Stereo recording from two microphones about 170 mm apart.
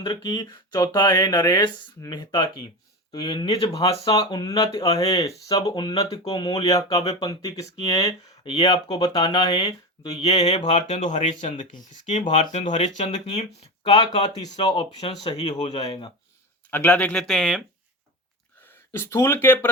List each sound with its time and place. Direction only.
0.0 s speech: 25° left (ahead or behind)
5.5 s speech: 25° left (ahead or behind)
10.1 s speech: 40° left (ahead or behind)
13.8 s speech: 25° left (ahead or behind)
16.6 s speech: 10° left (ahead or behind)
18.6 s speech: 15° left (ahead or behind)